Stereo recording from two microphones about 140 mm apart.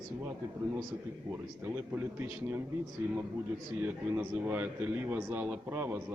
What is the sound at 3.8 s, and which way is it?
Speech, 10° right (ahead or behind).